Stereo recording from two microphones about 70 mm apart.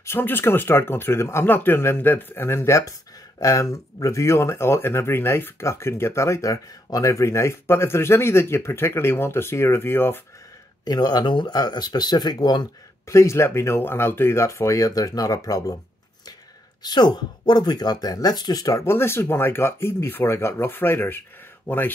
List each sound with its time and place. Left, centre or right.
0.0 s speech: left
10.9 s speech: left
13.1 s speech: left
16.8 s speech: left
18.9 s speech: left